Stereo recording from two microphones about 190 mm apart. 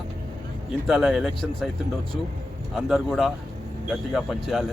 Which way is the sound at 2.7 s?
Centre (ahead or behind).